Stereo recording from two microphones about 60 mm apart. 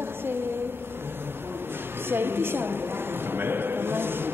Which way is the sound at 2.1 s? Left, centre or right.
Right.